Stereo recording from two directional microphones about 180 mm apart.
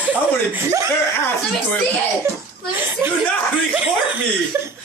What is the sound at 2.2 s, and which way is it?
Speech, 15° right (ahead or behind).